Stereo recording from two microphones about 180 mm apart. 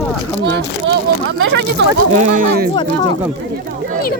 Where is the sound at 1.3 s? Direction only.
80° right.